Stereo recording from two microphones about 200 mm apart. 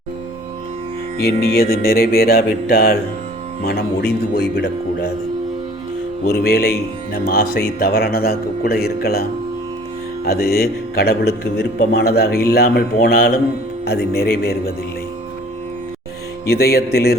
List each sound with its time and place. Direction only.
1.2 s speech: 50° left (ahead or behind)
6.3 s speech: 50° left (ahead or behind)
10.2 s speech: 50° left (ahead or behind)
16.5 s speech: 50° left (ahead or behind)